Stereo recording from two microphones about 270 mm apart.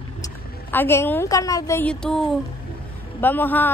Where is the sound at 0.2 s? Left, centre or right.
Centre.